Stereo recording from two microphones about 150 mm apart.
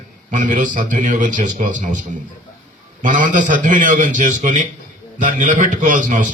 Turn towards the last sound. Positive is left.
turn(degrees=-60)  # may be behind; listen again after turning